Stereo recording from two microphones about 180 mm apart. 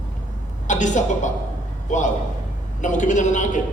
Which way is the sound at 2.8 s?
45° left (ahead or behind).